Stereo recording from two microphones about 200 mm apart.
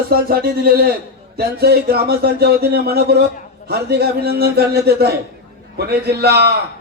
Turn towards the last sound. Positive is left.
turn(degrees=-55)  # may be behind; listen again after turning